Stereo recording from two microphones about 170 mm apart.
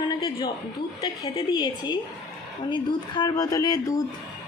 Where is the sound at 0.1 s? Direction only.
25° left (ahead or behind).